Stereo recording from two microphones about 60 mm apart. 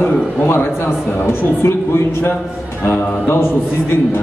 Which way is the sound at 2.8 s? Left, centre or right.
Left.